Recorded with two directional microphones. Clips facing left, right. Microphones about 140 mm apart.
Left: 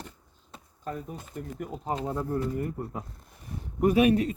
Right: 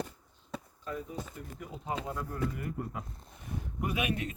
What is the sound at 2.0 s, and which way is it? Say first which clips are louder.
Speech: left 6 dB; 30° left (ahead or behind).